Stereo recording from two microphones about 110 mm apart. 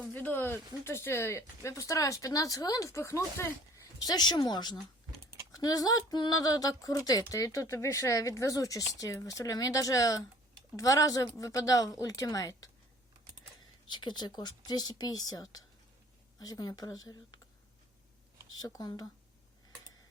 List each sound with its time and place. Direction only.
0.1 s speech: 15° left (ahead or behind)
4.0 s speech: 40° left (ahead or behind)
13.8 s speech: 45° left (ahead or behind)
18.5 s speech: 35° left (ahead or behind)